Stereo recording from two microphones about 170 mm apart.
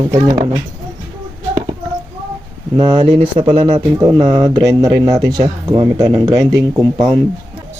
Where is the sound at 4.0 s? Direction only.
20° right (ahead or behind).